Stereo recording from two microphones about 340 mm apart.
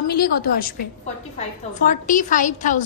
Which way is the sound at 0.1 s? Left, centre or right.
Left.